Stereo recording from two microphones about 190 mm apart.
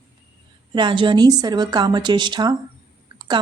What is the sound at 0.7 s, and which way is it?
Speech, 25° right (ahead or behind).